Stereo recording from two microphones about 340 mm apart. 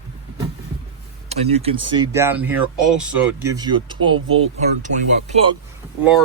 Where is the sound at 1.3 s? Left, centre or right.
Centre.